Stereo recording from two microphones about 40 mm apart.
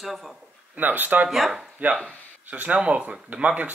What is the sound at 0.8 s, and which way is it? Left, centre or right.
Speech, right.